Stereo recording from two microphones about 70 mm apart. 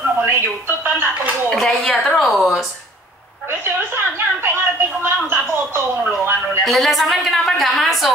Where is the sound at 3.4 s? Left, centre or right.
Right.